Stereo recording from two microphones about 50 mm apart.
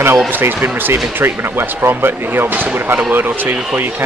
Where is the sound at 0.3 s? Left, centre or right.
Right.